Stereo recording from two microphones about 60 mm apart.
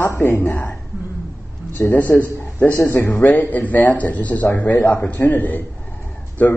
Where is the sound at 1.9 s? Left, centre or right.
Left.